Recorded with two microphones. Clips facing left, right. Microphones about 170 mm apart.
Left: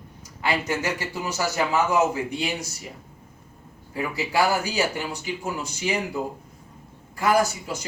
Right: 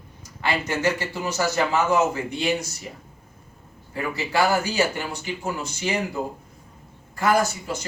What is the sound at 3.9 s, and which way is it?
A man's voice, 10° left (ahead or behind).